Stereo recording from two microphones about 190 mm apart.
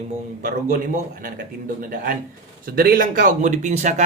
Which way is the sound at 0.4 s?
45° right (ahead or behind).